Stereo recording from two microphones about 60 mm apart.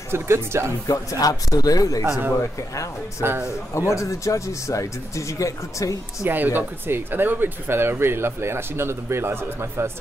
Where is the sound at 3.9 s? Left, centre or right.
Left.